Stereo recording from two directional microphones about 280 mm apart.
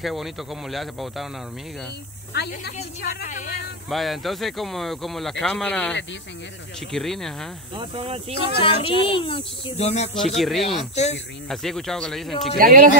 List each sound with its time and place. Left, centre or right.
0.0 s speech: centre
2.3 s a woman's voice: left
3.9 s speech: centre
7.7 s speech: centre
8.5 s speech: centre
10.1 s speech: centre
12.5 s speech: right